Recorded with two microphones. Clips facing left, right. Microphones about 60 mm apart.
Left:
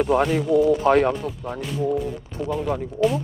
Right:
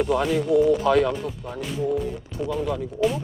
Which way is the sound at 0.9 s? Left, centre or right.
Left.